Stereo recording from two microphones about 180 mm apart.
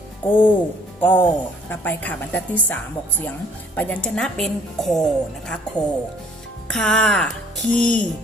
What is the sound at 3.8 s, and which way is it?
A woman's voice, 10° left (ahead or behind).